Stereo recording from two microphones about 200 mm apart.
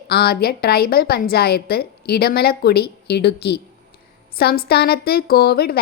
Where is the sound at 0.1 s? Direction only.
50° left (ahead or behind).